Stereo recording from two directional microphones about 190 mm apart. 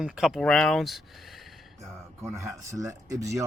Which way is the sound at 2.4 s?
15° right (ahead or behind).